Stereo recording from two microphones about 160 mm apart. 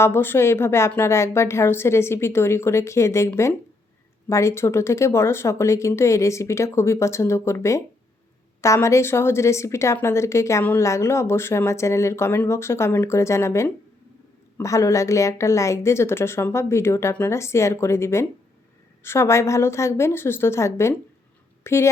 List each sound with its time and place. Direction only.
0.0 s a woman's voice: 15° left (ahead or behind)